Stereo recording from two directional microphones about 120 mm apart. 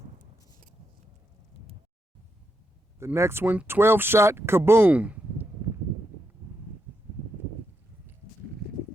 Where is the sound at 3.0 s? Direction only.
20° right (ahead or behind).